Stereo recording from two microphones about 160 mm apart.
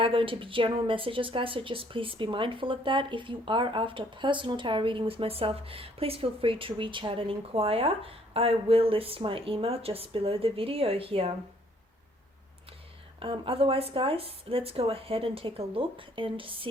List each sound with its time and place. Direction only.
0.0 s a woman's voice: 35° right (ahead or behind)
13.1 s a woman's voice: 35° right (ahead or behind)